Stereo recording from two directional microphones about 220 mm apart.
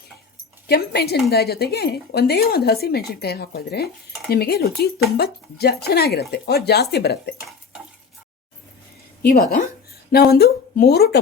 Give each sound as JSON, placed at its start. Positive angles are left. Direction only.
{"t": 0.7, "sound": "speech", "side_deg": 45}
{"t": 9.2, "sound": "speech", "side_deg": 40}